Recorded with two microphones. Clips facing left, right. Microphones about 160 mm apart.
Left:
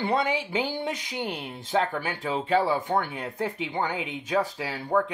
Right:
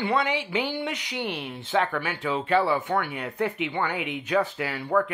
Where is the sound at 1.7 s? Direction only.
35° left (ahead or behind).